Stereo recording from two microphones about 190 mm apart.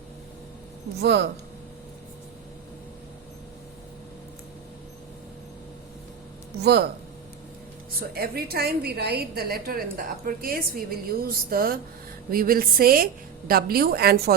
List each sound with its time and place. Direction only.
1.0 s speech: 65° right (ahead or behind)
6.6 s speech: 60° right (ahead or behind)
8.1 s a woman's voice: 55° right (ahead or behind)